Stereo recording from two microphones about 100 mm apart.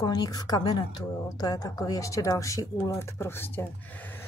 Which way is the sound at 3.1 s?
20° left (ahead or behind).